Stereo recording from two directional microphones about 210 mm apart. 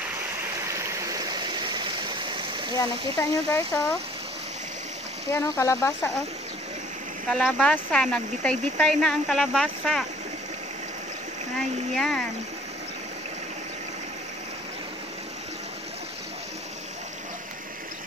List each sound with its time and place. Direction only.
0.7 s stream: 15° right (ahead or behind)
2.7 s speech: 15° left (ahead or behind)
5.3 s speech: 15° left (ahead or behind)
7.2 s speech: centre (ahead or behind)
11.9 s speech: centre (ahead or behind)